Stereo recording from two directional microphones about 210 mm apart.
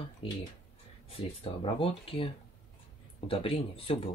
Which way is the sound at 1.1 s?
25° left (ahead or behind).